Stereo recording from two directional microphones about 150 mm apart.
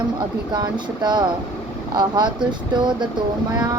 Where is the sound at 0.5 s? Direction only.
30° right (ahead or behind).